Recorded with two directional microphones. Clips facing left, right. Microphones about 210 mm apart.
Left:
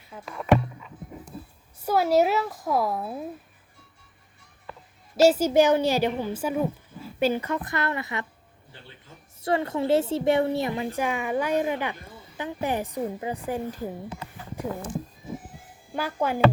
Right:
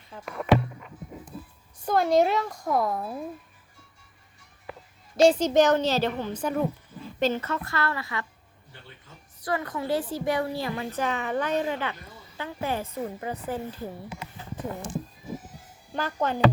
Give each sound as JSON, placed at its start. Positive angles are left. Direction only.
{"t": 0.1, "sound": "a woman's voice", "side_deg": 5}
{"t": 1.8, "sound": "a woman's voice", "side_deg": 5}
{"t": 5.1, "sound": "a woman's voice", "side_deg": 5}
{"t": 9.4, "sound": "a woman's voice", "side_deg": 25}
{"t": 16.0, "sound": "a woman's voice", "side_deg": 10}